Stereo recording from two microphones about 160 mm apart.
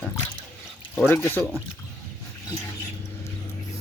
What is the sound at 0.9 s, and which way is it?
Speech, 15° left (ahead or behind).